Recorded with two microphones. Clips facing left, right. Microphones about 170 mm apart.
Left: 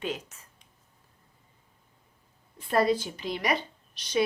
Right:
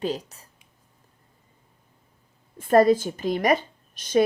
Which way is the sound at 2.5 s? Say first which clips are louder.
Right 8 dB; 45° right (ahead or behind).